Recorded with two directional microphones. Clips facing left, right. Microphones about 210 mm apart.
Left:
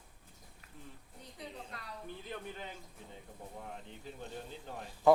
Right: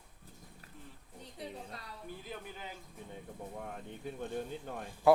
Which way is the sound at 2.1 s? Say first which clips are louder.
Left 1 dB; 5° right (ahead or behind).